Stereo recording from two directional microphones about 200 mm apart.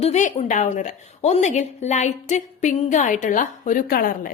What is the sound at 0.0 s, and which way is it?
A woman's voice, 35° left (ahead or behind).